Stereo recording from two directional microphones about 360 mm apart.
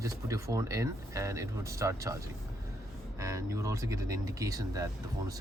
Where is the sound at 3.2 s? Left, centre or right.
Centre.